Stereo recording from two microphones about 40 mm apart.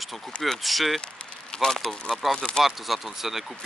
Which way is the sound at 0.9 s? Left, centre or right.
Left.